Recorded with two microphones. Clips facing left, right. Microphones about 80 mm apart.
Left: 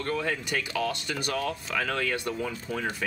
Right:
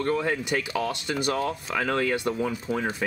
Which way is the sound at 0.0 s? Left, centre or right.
Right.